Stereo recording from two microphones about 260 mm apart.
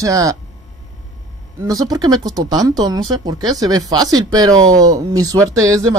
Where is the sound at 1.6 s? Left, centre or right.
Centre.